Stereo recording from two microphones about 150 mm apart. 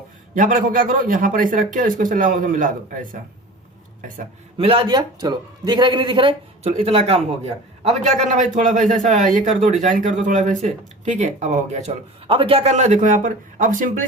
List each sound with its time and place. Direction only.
0.3 s speech: 65° right (ahead or behind)
4.5 s speech: 40° right (ahead or behind)
8.3 s speech: 55° right (ahead or behind)